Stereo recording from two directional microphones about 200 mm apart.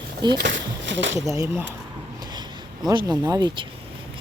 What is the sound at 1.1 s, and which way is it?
Speech, 15° right (ahead or behind).